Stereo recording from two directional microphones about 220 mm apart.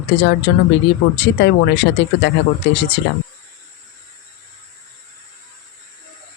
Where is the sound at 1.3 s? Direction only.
50° left (ahead or behind).